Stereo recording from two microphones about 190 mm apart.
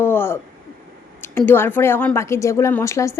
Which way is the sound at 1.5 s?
10° left (ahead or behind).